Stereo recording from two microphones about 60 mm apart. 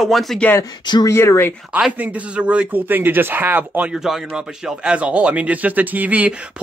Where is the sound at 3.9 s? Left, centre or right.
Centre.